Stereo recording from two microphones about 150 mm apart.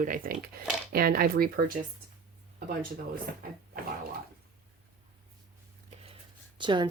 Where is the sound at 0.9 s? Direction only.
80° right.